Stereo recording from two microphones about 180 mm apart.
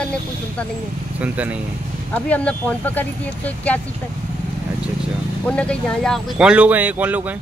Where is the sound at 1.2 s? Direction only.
10° right (ahead or behind).